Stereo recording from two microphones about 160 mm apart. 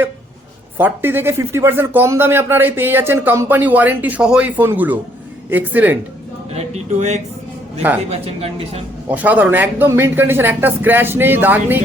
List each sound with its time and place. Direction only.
0.8 s speech: 10° right (ahead or behind)
6.5 s speech: 40° right (ahead or behind)
9.0 s speech: 10° right (ahead or behind)